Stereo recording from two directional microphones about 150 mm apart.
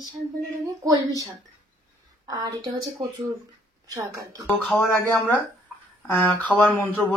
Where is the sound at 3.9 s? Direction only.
20° right (ahead or behind).